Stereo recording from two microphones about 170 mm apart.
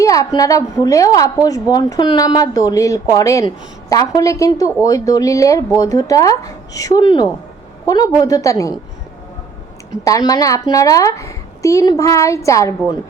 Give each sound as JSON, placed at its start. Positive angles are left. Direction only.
{"t": 0.0, "sound": "a sound", "side_deg": 20}
{"t": 0.3, "sound": "a woman's voice", "side_deg": 20}
{"t": 10.0, "sound": "a woman's voice", "side_deg": 20}